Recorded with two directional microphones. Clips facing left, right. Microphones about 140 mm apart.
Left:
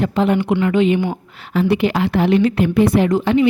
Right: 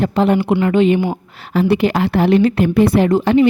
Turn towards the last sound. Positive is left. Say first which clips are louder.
# right 2 dB
turn(degrees=-35)  # may be behind; listen again after turning